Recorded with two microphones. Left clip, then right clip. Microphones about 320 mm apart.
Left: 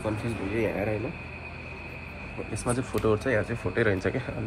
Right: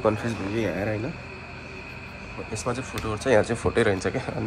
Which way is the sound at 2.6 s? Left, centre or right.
Centre.